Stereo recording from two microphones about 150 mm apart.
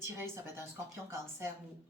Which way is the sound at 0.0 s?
15° right (ahead or behind).